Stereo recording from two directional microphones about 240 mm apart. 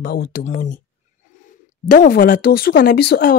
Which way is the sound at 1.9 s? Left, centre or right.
Left.